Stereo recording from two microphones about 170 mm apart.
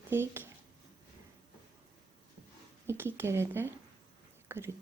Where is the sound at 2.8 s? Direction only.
15° right (ahead or behind).